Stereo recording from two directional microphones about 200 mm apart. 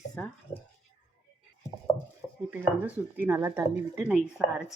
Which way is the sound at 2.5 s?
10° right (ahead or behind).